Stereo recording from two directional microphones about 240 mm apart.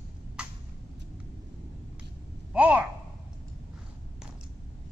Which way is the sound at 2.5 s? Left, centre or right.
Centre.